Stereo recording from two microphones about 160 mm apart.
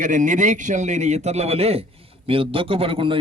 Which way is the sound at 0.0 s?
50° right (ahead or behind).